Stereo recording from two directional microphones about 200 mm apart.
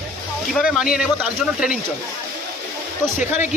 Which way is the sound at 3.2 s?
40° left (ahead or behind).